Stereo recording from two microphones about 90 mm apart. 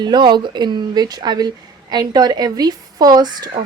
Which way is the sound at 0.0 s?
55° right (ahead or behind).